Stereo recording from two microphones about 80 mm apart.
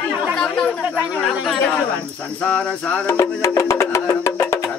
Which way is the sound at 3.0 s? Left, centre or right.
Left.